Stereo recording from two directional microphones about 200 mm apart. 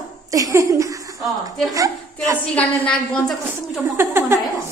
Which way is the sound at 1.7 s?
15° right (ahead or behind).